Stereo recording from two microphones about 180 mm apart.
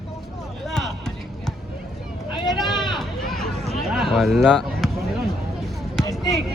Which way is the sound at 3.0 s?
Centre (ahead or behind).